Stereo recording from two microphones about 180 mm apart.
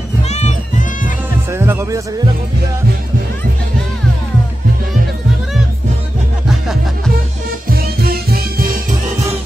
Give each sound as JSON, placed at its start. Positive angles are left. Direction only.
{"t": 0.3, "sound": "music", "side_deg": 40}
{"t": 1.5, "sound": "music", "side_deg": -15}
{"t": 7.6, "sound": "music", "side_deg": -55}